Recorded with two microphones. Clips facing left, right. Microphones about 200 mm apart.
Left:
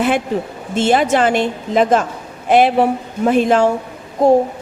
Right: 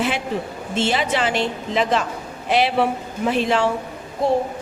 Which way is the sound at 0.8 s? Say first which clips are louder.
Left 7 dB; 50° left (ahead or behind).